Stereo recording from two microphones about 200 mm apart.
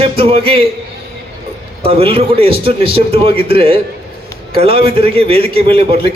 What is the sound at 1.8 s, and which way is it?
A man's voice, 30° right (ahead or behind).